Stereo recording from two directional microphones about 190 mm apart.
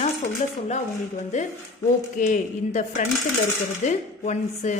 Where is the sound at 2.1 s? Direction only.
40° left (ahead or behind).